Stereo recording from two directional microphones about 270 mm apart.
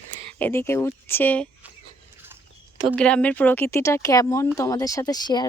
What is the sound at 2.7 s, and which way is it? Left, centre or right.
Speech, centre.